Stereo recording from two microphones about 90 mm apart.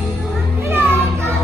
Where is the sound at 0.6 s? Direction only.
25° right (ahead or behind).